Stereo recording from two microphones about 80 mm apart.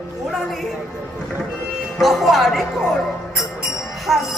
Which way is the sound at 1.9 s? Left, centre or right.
Centre.